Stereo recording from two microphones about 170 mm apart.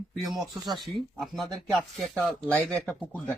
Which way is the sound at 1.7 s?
Centre (ahead or behind).